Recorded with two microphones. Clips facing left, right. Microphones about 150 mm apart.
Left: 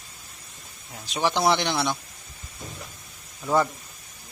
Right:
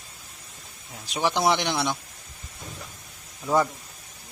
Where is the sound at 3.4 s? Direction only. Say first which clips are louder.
Even; centre (ahead or behind).